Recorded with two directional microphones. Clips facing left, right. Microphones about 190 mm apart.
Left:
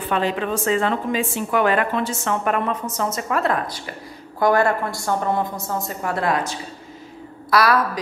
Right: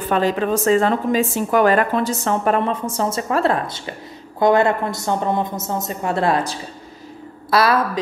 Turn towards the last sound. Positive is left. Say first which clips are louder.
# right 1 dB
turn(degrees=-25)  # may be behind; listen again after turning